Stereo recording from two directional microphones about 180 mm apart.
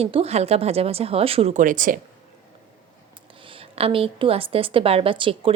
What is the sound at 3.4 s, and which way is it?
A woman's voice, 30° right (ahead or behind).